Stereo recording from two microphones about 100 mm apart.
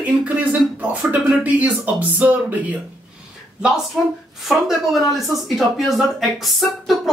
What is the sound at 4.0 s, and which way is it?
Speech, centre (ahead or behind).